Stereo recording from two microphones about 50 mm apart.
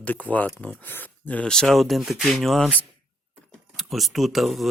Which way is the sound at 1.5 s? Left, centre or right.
Centre.